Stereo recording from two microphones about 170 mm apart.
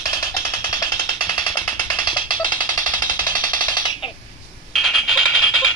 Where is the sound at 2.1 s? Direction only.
25° left (ahead or behind).